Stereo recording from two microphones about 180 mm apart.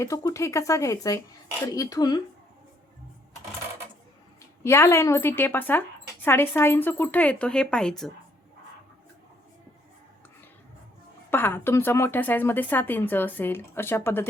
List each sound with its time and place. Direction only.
0.0 s a woman's voice: 20° left (ahead or behind)
4.6 s speech: 15° left (ahead or behind)
11.3 s speech: 10° left (ahead or behind)